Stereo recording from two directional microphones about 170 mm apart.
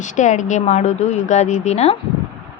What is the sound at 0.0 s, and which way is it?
Speech, 45° left (ahead or behind).